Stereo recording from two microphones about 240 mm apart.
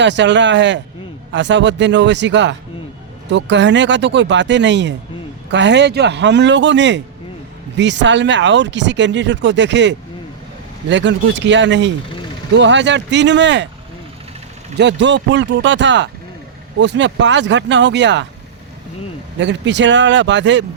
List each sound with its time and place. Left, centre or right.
0.0 s speech: right
14.8 s speech: right
19.4 s speech: right